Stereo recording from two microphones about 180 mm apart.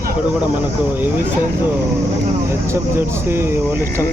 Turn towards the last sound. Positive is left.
turn(degrees=-15)  # may be behind; listen again after turning